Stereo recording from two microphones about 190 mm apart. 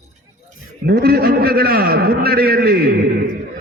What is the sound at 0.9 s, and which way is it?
A man's voice, 55° right (ahead or behind).